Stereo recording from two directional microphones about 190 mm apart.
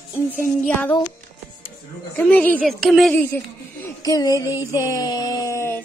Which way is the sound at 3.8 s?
20° left (ahead or behind).